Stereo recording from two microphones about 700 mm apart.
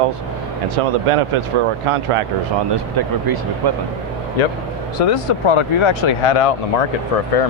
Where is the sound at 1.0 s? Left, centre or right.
Right.